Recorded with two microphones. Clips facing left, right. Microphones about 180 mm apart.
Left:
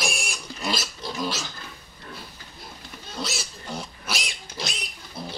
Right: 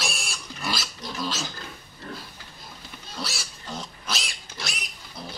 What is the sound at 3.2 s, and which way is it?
Pig, 20° left (ahead or behind).